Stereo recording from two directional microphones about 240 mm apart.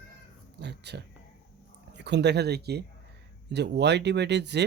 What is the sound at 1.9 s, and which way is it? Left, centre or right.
Speech, right.